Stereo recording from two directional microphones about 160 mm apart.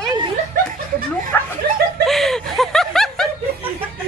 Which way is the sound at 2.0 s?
Centre (ahead or behind).